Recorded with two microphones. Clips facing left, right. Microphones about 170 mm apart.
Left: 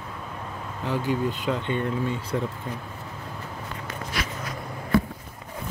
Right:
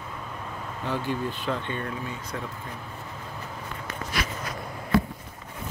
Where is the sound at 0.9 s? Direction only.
10° left (ahead or behind).